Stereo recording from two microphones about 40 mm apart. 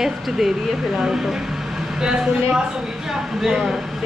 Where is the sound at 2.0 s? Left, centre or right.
Right.